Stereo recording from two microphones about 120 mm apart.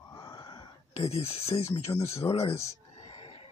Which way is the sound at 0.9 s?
55° left (ahead or behind).